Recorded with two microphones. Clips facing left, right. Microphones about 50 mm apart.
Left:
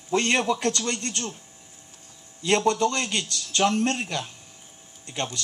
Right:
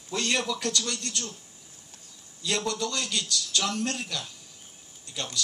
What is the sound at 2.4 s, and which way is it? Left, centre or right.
Speech, left.